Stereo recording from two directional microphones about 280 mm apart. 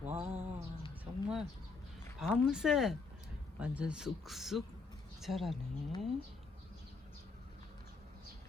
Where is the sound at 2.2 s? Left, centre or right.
Centre.